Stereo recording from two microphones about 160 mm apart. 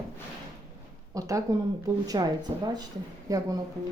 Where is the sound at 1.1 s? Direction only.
20° right (ahead or behind).